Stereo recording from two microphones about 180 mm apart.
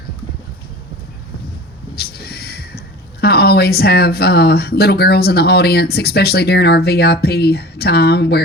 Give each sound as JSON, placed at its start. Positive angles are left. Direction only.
{"t": 2.0, "sound": "speech", "side_deg": 60}